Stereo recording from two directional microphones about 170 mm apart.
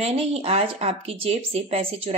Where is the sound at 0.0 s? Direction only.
35° right (ahead or behind).